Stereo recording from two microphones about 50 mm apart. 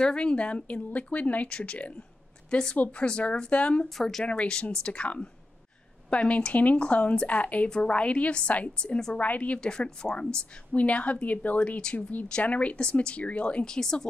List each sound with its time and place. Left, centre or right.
0.0 s a woman's voice: centre
9.6 s a woman's voice: centre
13.7 s speech: centre